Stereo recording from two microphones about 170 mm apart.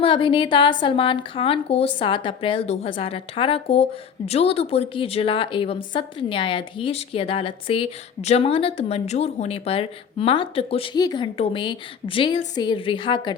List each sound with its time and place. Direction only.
0.0 s a woman's voice: 30° left (ahead or behind)